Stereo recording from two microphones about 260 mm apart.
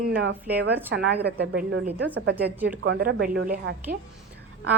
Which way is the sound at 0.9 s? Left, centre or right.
Right.